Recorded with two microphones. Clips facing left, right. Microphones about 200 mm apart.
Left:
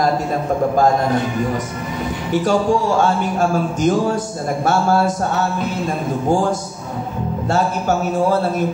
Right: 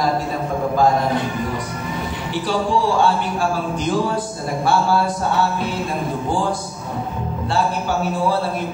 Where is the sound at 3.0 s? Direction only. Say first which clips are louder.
Left 2 dB; 45° left (ahead or behind).